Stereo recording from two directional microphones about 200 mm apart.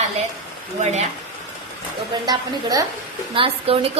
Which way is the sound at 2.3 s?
15° right (ahead or behind).